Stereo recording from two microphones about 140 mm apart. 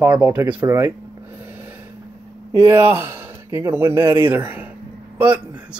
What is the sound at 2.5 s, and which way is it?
Speech, 20° right (ahead or behind).